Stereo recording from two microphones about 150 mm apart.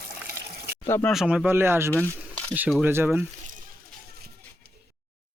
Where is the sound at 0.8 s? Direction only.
15° left (ahead or behind).